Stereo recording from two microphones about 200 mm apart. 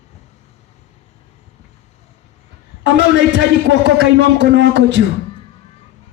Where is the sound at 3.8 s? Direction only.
65° right (ahead or behind).